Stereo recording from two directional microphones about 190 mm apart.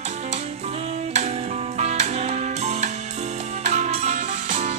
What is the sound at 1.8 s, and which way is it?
Music, 35° right (ahead or behind).